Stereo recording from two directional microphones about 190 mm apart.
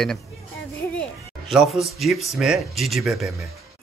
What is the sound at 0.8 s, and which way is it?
Music, 10° left (ahead or behind).